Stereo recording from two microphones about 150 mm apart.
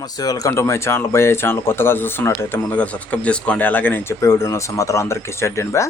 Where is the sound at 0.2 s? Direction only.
25° left (ahead or behind).